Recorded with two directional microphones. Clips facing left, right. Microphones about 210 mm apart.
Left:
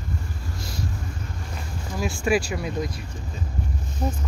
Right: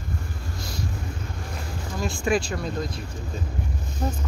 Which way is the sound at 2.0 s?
10° left (ahead or behind).